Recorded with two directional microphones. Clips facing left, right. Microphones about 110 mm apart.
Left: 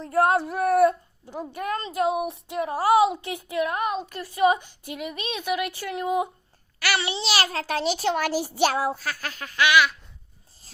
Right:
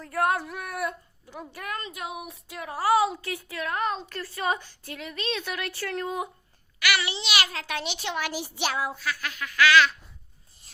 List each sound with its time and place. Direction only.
0.0 s a sound: 30° left (ahead or behind)
1.2 s a woman's voice: 30° left (ahead or behind)
6.7 s a child's voice: 35° left (ahead or behind)
9.6 s a woman's voice: 15° left (ahead or behind)